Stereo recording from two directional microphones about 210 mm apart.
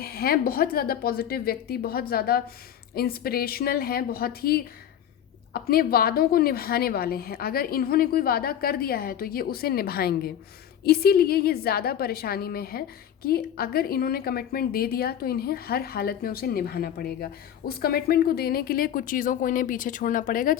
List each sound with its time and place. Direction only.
0.0 s a woman's voice: 45° left (ahead or behind)